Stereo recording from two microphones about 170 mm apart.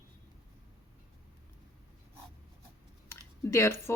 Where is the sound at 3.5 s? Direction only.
15° left (ahead or behind).